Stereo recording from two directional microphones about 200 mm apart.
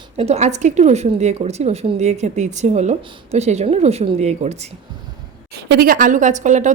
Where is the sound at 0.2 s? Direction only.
35° right (ahead or behind).